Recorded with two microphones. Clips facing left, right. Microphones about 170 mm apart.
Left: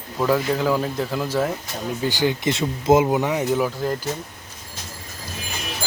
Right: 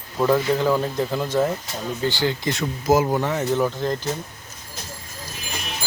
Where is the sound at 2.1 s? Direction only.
15° left (ahead or behind).